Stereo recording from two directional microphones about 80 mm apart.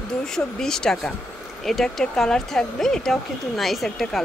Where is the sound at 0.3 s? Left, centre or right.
Centre.